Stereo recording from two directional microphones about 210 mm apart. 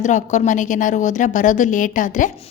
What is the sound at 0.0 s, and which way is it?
A woman's voice, 35° left (ahead or behind).